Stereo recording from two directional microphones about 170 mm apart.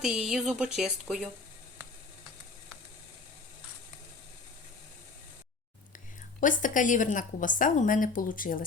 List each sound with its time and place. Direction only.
0.0 s speech: 5° right (ahead or behind)
6.4 s a woman's voice: 50° left (ahead or behind)